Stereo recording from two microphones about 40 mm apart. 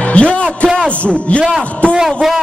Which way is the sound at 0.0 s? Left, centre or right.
Left.